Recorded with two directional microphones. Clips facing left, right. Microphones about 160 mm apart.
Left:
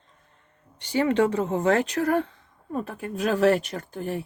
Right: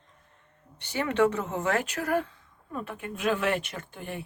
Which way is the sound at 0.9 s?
35° left (ahead or behind).